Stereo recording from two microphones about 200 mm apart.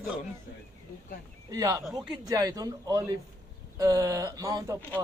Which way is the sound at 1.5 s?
15° right (ahead or behind).